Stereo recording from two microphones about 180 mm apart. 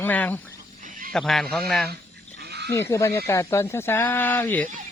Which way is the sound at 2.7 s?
15° left (ahead or behind).